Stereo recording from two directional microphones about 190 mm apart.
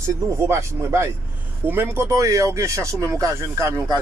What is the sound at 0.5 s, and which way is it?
Speech, 15° right (ahead or behind).